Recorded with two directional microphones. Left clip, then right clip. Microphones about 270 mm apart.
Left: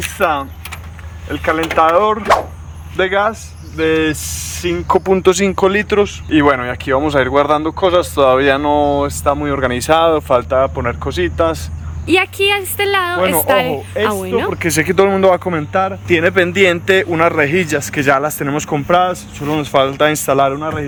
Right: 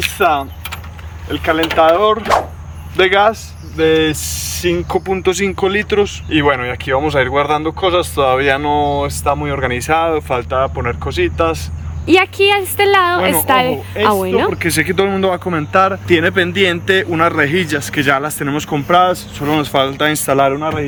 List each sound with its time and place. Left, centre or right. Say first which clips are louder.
0.2 s a woman's voice: right 1 dB; centre
12.0 s a woman's voice: right 2 dB; centre
14.5 s speech: left 1 dB; centre